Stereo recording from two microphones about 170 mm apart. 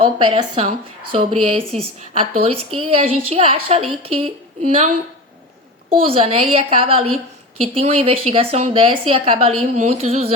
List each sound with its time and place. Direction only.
0.0 s a woman's voice: 35° right (ahead or behind)
6.0 s a woman's voice: 35° right (ahead or behind)